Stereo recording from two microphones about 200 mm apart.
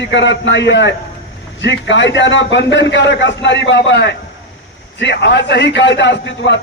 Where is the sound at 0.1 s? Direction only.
65° left (ahead or behind).